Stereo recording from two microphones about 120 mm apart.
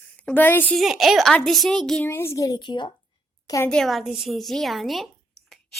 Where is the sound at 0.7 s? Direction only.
5° right (ahead or behind).